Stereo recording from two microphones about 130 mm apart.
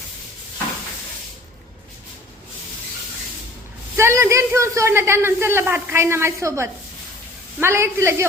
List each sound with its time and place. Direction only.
3.9 s a man's voice: 20° right (ahead or behind)